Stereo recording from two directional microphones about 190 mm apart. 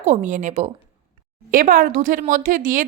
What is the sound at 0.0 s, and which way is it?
Speech, 40° right (ahead or behind).